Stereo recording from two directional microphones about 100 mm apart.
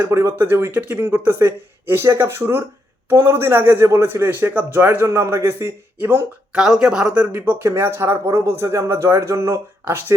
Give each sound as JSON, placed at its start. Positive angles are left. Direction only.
{"t": 0.0, "sound": "speech", "side_deg": -30}
{"t": 5.0, "sound": "speech", "side_deg": -30}
{"t": 6.5, "sound": "speech", "side_deg": -5}